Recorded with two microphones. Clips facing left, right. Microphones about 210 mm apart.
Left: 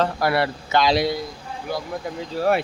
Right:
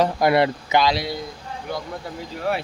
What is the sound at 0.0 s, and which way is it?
Speech, 20° right (ahead or behind).